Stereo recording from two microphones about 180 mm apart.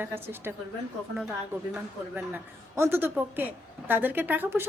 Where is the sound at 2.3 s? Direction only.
15° right (ahead or behind).